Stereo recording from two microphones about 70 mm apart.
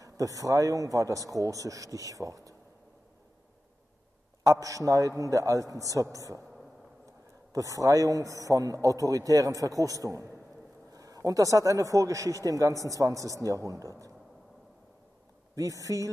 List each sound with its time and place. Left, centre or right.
0.0 s a man's voice: right
4.4 s a man's voice: right
7.5 s a man's voice: right
15.5 s a man's voice: right